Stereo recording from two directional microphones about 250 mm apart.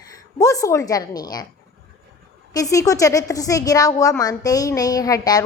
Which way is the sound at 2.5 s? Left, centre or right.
Centre.